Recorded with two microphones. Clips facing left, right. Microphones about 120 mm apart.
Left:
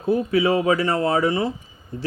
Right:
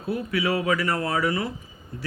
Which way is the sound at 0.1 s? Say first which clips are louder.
Left 6 dB; 30° left (ahead or behind).